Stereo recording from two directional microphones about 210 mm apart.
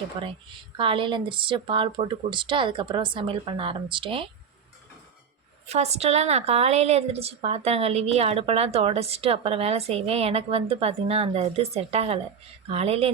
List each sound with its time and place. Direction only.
0.2 s a woman's voice: 25° right (ahead or behind)
5.6 s a woman's voice: 30° right (ahead or behind)